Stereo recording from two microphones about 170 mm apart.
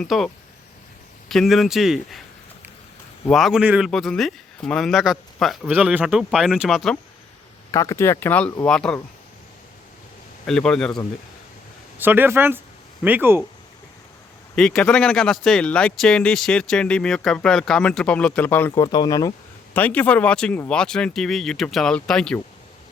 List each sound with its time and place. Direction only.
0.0 s speech: centre (ahead or behind)
1.3 s speech: centre (ahead or behind)
3.2 s speech: centre (ahead or behind)
7.7 s speech: 20° left (ahead or behind)
10.4 s speech: 5° left (ahead or behind)
11.9 s speech: 10° right (ahead or behind)
14.5 s speech: 5° left (ahead or behind)
18.7 s speech: 25° left (ahead or behind)
19.7 s speech: 10° left (ahead or behind)